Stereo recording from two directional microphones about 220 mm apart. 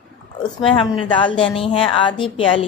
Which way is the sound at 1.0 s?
20° left (ahead or behind).